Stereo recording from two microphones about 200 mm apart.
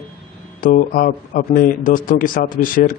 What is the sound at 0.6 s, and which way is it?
Speech, 45° left (ahead or behind).